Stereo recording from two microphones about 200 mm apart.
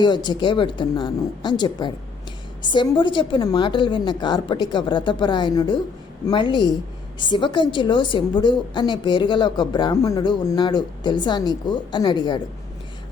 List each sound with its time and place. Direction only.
0.0 s a woman's voice: 20° left (ahead or behind)